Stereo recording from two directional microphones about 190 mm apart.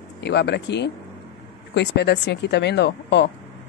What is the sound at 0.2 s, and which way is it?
Speech, 65° left (ahead or behind).